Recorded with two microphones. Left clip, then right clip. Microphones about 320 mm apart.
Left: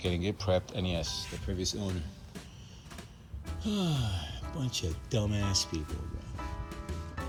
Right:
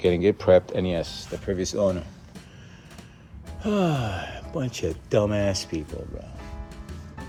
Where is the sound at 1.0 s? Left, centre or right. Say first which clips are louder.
Right 7 dB; centre.